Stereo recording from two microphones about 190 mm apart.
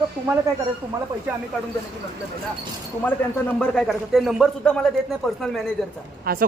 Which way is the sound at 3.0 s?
10° left (ahead or behind).